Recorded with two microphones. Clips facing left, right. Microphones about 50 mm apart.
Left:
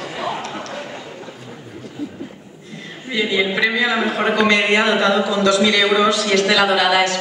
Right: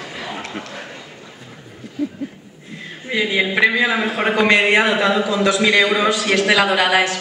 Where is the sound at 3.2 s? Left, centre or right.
Right.